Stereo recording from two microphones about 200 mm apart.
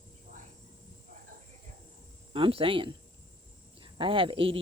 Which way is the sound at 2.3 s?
25° right (ahead or behind).